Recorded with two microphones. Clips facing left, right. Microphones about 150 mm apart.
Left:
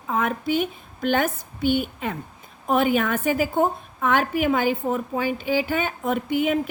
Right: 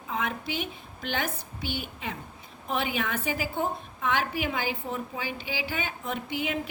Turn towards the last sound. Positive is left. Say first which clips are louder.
# left 9 dB
turn(degrees=50)  # may be behind; listen again after turning